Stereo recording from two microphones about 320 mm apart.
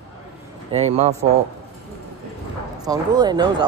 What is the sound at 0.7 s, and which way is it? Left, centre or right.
Speech, centre.